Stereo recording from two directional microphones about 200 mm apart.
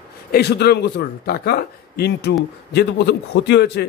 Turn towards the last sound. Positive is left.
turn(degrees=60)  # may be behind; listen again after turning